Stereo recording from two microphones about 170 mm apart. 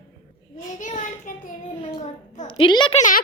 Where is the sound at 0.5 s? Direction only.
50° left (ahead or behind).